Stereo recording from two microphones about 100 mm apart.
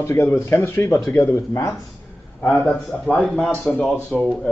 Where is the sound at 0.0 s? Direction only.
25° left (ahead or behind).